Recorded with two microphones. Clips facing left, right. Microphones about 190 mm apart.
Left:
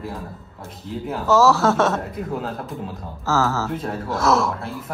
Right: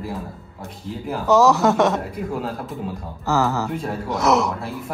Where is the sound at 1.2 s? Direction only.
15° right (ahead or behind).